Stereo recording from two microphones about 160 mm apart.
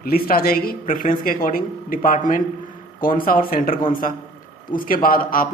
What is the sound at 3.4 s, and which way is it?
Speech, 60° left (ahead or behind).